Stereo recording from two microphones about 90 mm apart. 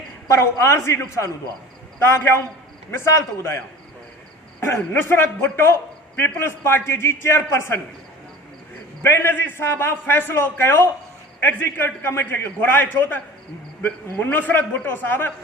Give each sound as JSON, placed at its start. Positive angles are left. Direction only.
{"t": 0.3, "sound": "a man's voice", "side_deg": 30}
{"t": 4.8, "sound": "a man's voice", "side_deg": 20}
{"t": 9.0, "sound": "a man's voice", "side_deg": 25}